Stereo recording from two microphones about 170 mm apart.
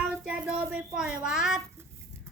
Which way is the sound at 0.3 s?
10° right (ahead or behind).